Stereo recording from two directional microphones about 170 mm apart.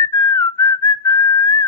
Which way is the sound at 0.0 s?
15° left (ahead or behind).